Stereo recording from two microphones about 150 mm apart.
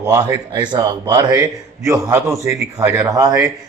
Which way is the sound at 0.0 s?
25° right (ahead or behind).